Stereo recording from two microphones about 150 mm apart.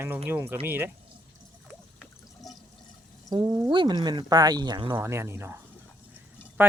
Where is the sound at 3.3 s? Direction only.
25° right (ahead or behind).